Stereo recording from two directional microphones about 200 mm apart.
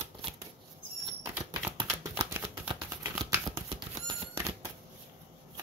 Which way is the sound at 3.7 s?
20° right (ahead or behind).